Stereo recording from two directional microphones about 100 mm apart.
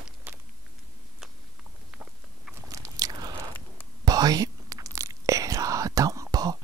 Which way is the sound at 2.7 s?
35° right (ahead or behind).